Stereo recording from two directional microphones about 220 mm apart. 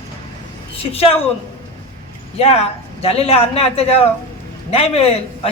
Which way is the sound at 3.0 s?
25° left (ahead or behind).